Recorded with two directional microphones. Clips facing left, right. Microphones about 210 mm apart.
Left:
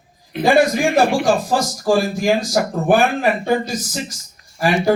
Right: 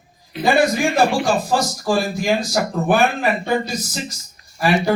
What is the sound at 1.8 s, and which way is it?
Speech, 45° left (ahead or behind).